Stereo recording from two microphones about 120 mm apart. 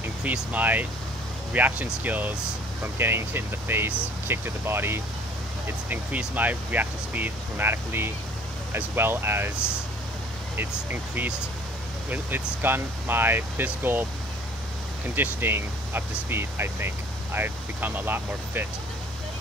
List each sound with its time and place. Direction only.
0.2 s speech: 10° right (ahead or behind)
10.7 s speech: 10° right (ahead or behind)
15.1 s speech: 20° right (ahead or behind)